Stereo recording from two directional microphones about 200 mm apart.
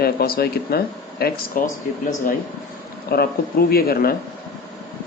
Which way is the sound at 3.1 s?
50° left (ahead or behind).